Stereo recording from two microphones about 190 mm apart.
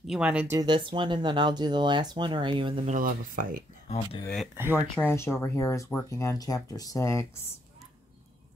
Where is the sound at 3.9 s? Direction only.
30° left (ahead or behind).